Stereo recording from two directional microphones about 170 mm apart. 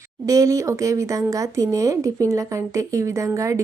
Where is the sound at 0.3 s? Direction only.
20° right (ahead or behind).